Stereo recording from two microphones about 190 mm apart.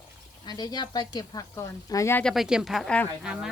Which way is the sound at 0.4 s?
20° left (ahead or behind).